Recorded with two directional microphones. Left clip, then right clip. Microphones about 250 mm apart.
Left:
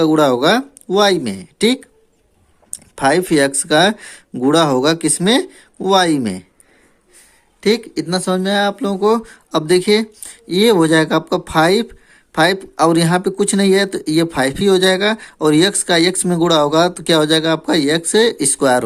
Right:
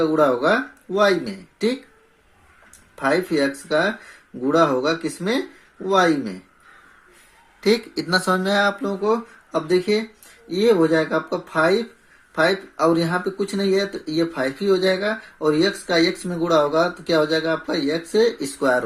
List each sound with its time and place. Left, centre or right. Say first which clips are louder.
0.0 s speech: left 5 dB; left
7.6 s speech: left 4 dB; left